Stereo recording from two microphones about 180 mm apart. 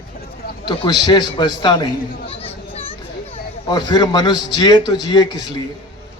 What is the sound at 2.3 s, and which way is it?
Children playing, 35° left (ahead or behind).